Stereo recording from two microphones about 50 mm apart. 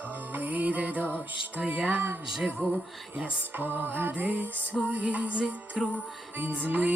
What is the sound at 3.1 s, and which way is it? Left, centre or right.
Music, right.